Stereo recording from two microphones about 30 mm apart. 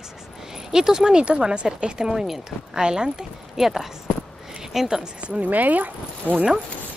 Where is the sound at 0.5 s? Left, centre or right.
Centre.